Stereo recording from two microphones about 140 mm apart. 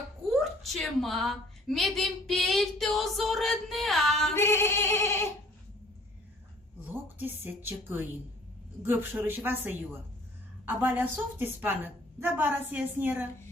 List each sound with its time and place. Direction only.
0.3 s a woman's voice: centre (ahead or behind)
4.4 s a sound: 15° left (ahead or behind)
6.8 s a woman's voice: 15° right (ahead or behind)